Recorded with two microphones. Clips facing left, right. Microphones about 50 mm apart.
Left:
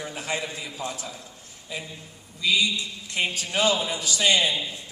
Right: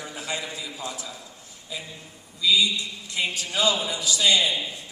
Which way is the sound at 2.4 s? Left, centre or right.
Left.